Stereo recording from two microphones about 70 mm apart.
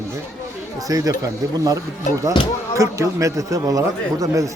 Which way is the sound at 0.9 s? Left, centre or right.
Right.